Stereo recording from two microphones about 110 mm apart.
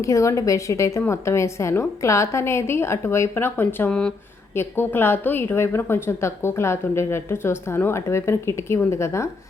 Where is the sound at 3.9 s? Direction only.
10° left (ahead or behind).